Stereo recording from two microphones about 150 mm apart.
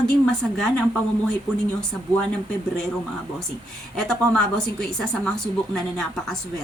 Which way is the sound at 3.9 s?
5° left (ahead or behind).